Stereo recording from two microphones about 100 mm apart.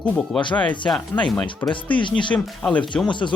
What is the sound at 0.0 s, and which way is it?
Speech, 15° left (ahead or behind).